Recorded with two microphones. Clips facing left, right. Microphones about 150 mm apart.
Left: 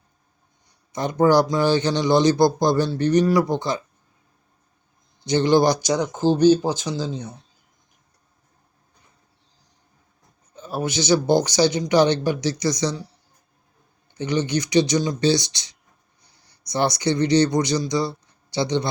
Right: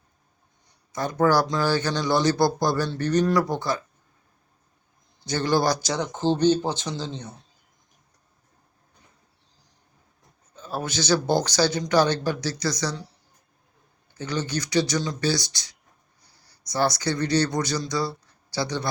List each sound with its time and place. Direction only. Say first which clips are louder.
1.2 s speech: left 4 dB; 15° left (ahead or behind)
5.2 s speech: left 6 dB; 20° left (ahead or behind)
10.5 s speech: left 4 dB; 15° left (ahead or behind)
14.1 s speech: left 6 dB; 20° left (ahead or behind)